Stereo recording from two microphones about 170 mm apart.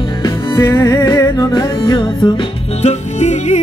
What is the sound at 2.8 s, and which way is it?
Music, 40° left (ahead or behind).